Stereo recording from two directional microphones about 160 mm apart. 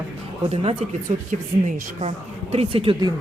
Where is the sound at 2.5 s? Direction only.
35° right (ahead or behind).